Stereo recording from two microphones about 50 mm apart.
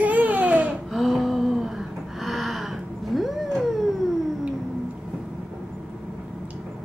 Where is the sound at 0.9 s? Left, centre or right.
Centre.